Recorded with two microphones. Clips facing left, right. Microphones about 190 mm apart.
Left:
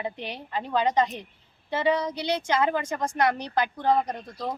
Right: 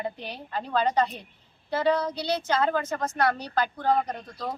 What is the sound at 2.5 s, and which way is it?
Speech, 15° left (ahead or behind).